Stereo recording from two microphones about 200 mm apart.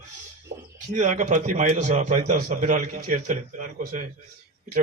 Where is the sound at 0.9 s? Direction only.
35° right (ahead or behind).